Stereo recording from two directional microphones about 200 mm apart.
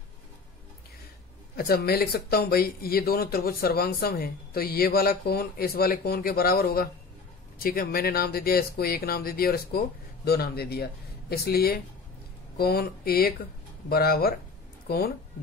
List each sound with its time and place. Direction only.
1.6 s speech: 50° left (ahead or behind)